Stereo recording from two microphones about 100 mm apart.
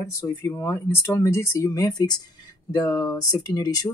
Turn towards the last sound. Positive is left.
turn(degrees=40)  # may be behind; listen again after turning